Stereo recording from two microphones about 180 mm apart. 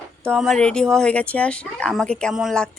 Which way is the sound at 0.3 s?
Centre (ahead or behind).